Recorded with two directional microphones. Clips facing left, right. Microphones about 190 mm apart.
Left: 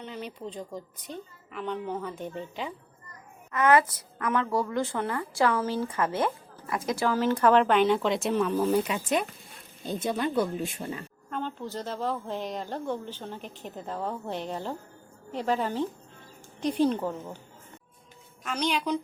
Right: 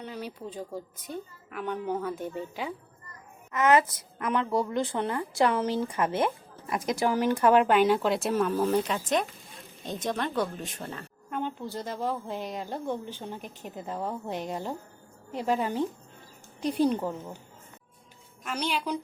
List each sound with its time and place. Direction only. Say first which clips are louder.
0.0 s a woman's voice: even; 10° right (ahead or behind)
3.5 s a woman's voice: even; 20° right (ahead or behind); by 11.0 s 10° left (ahead or behind)
11.3 s a woman's voice: right 1 dB; 15° right (ahead or behind)
18.4 s a woman's voice: left 2 dB; 5° right (ahead or behind)